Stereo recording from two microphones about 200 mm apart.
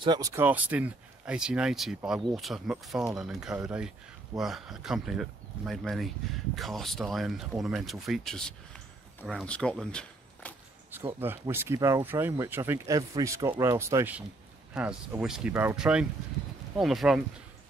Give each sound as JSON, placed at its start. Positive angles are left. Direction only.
{"t": 0.0, "sound": "speech", "side_deg": -20}
{"t": 0.4, "sound": "speech", "side_deg": -10}
{"t": 11.1, "sound": "speech", "side_deg": -10}